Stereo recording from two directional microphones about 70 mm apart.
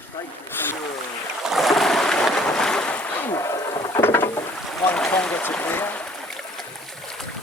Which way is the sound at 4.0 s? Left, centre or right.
Left.